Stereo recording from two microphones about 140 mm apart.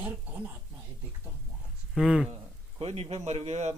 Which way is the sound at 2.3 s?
45° right (ahead or behind).